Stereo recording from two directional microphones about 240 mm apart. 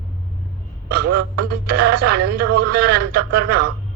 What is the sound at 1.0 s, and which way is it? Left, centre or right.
Speech, right.